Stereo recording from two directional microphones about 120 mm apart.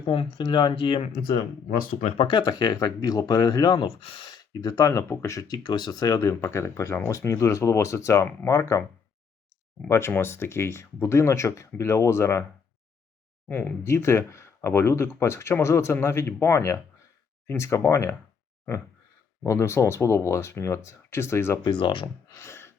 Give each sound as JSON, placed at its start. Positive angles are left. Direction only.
{"t": 0.0, "sound": "speech", "side_deg": 50}
{"t": 2.1, "sound": "speech", "side_deg": 45}
{"t": 9.9, "sound": "speech", "side_deg": 20}
{"t": 13.5, "sound": "speech", "side_deg": 15}
{"t": 19.4, "sound": "speech", "side_deg": 20}
{"t": 21.6, "sound": "speech", "side_deg": 40}
{"t": 22.4, "sound": "a sound", "side_deg": 20}